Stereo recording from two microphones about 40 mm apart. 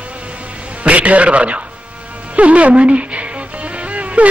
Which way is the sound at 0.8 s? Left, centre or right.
Right.